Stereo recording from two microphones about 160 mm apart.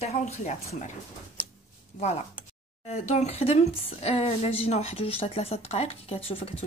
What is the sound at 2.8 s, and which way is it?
Speech, 40° left (ahead or behind).